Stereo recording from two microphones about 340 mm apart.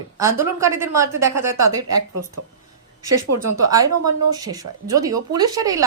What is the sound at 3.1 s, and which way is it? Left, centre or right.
Speech, right.